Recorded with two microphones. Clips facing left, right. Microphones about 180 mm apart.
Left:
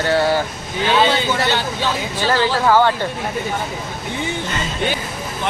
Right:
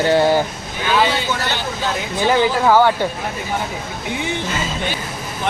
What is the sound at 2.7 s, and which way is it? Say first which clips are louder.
Speech: right 1 dB; 10° right (ahead or behind).